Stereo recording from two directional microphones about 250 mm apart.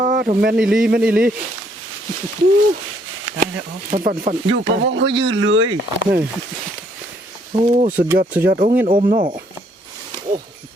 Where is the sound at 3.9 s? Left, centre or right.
Right.